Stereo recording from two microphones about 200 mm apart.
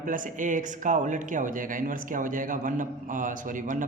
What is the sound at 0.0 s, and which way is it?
Speech, 40° right (ahead or behind).